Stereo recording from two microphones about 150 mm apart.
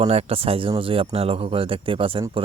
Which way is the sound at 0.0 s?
40° right (ahead or behind).